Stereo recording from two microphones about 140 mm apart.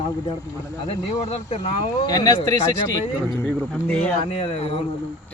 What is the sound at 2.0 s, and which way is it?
Speech, 30° left (ahead or behind).